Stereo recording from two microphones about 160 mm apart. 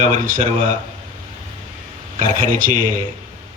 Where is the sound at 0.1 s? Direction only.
55° right (ahead or behind).